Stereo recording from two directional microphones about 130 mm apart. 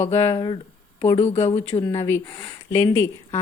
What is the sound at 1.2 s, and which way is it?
Speech, 55° left (ahead or behind).